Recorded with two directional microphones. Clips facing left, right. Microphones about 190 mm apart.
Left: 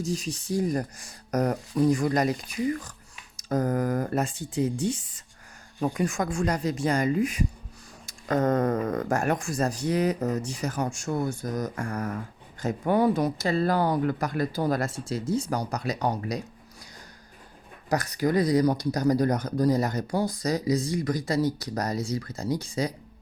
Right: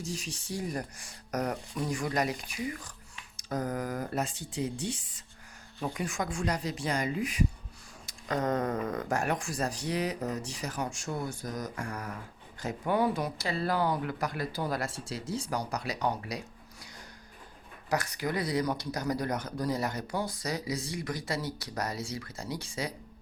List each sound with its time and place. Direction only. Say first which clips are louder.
0.0 s speech: left 8 dB; 40° left (ahead or behind)
17.8 s speech: left 6 dB; 40° left (ahead or behind)